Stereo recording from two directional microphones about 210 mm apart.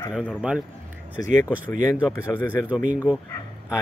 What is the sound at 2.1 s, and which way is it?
Speech, 10° left (ahead or behind).